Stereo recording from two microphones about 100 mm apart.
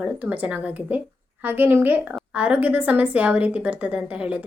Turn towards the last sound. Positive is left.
turn(degrees=-15)  # may be behind; listen again after turning